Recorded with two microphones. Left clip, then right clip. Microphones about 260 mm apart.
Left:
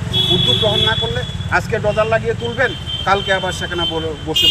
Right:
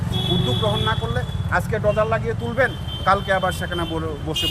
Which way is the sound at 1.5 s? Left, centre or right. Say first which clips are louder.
Left 4 dB; right.